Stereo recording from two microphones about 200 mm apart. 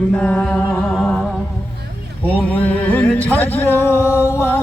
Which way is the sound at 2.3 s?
5° left (ahead or behind).